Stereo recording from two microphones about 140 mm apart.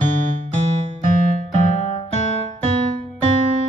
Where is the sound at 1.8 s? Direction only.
50° left (ahead or behind).